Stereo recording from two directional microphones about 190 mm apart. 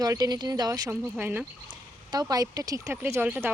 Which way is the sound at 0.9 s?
10° right (ahead or behind).